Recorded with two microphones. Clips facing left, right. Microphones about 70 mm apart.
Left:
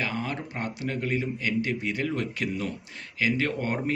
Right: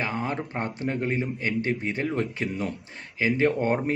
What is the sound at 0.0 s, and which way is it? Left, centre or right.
Speech, right.